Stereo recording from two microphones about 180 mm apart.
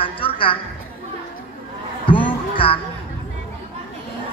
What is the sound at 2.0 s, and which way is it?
Music, 30° left (ahead or behind).